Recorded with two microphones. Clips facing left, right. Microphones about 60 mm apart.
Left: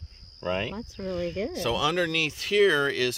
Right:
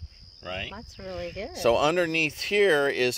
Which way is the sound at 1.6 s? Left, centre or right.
Right.